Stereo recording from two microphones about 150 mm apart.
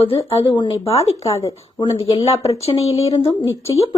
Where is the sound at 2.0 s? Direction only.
40° left (ahead or behind).